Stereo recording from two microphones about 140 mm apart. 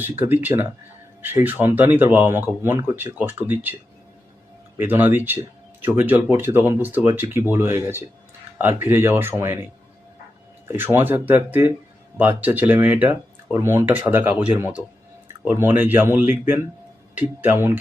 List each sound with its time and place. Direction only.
0.0 s speech: 15° right (ahead or behind)
4.8 s speech: 15° right (ahead or behind)
10.7 s speech: 15° right (ahead or behind)